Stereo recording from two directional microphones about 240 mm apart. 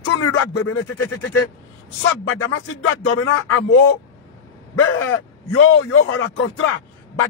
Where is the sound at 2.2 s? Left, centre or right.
Left.